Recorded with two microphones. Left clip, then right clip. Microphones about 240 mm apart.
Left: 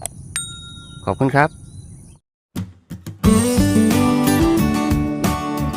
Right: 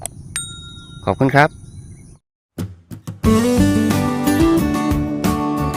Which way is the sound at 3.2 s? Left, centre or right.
Centre.